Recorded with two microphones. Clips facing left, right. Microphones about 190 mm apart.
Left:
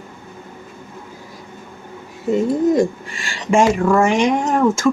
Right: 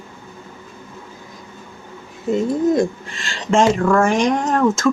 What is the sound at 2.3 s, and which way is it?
A woman's voice, 10° left (ahead or behind).